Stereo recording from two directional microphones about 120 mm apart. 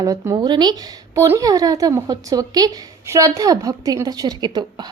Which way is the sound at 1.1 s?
25° right (ahead or behind).